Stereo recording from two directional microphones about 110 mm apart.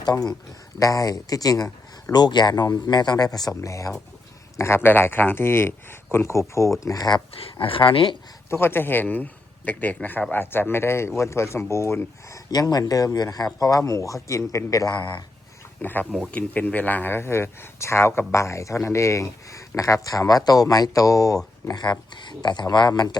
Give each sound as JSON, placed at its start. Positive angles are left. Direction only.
{"t": 0.0, "sound": "speech", "side_deg": 35}
{"t": 3.6, "sound": "a man's voice", "side_deg": 30}
{"t": 7.6, "sound": "speech", "side_deg": 55}
{"t": 8.4, "sound": "a man's voice", "side_deg": 20}
{"t": 12.5, "sound": "speech", "side_deg": 35}
{"t": 15.8, "sound": "a man's voice", "side_deg": 15}
{"t": 21.7, "sound": "speech", "side_deg": 40}